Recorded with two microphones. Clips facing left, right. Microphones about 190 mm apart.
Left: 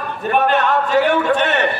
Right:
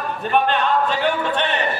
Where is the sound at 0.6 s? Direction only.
75° left (ahead or behind).